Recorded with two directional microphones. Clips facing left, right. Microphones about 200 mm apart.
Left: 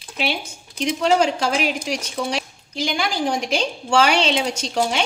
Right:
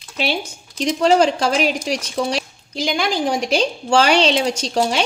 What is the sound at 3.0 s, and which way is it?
Speech, 35° right (ahead or behind).